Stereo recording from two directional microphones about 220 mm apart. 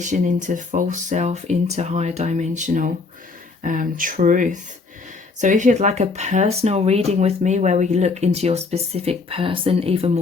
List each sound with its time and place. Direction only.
0.0 s speech: 35° right (ahead or behind)